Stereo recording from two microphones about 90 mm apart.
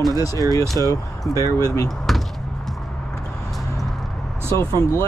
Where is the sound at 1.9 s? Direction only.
Centre (ahead or behind).